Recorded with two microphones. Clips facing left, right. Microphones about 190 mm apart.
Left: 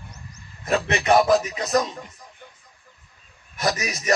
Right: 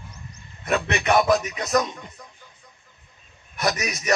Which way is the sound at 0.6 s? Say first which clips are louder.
Left 2 dB; 35° left (ahead or behind).